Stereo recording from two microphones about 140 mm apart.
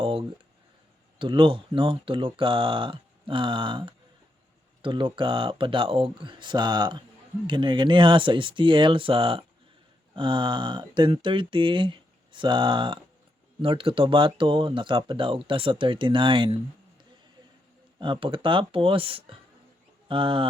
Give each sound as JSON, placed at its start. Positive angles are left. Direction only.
{"t": 0.0, "sound": "a sound", "side_deg": -40}
{"t": 1.2, "sound": "speech", "side_deg": -35}
{"t": 18.0, "sound": "speech", "side_deg": -35}